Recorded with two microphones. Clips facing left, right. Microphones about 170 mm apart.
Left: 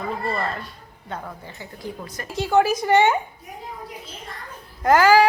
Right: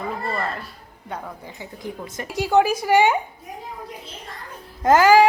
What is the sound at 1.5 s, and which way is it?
Speech, 20° right (ahead or behind).